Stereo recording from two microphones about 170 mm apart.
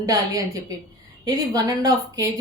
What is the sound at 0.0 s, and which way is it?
A woman's voice, 20° right (ahead or behind).